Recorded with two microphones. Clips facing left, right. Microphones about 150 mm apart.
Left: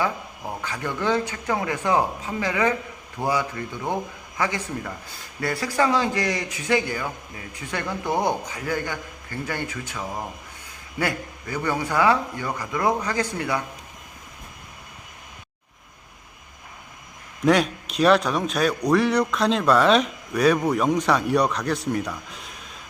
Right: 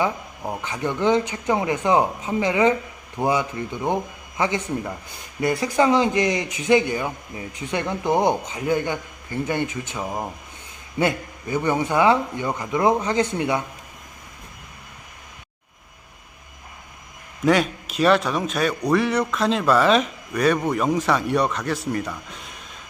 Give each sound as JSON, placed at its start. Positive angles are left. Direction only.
{"t": 0.0, "sound": "speech", "side_deg": -20}
{"t": 17.4, "sound": "a man's voice", "side_deg": 0}